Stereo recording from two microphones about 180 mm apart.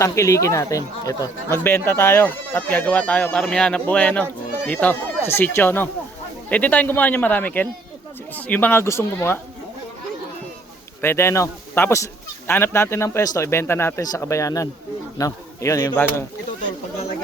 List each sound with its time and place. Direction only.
0.0 s speech: 15° left (ahead or behind)
11.0 s speech: 15° left (ahead or behind)